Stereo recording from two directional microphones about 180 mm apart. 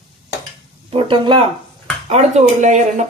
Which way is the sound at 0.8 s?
30° right (ahead or behind).